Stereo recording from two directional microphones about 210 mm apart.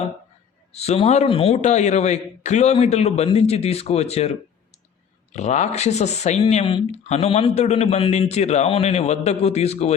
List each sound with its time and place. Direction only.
0.7 s speech: 30° left (ahead or behind)
5.3 s speech: 35° left (ahead or behind)